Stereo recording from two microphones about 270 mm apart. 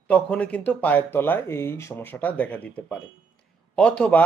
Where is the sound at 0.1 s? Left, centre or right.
Centre.